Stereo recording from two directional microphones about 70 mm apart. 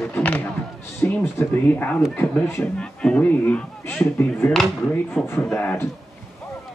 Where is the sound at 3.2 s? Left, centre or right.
Left.